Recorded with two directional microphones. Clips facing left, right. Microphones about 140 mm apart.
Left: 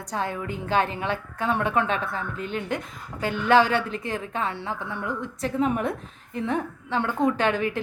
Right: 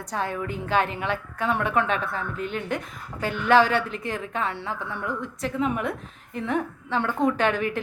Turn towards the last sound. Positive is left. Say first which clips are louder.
# even
turn(degrees=25)  # may be behind; listen again after turning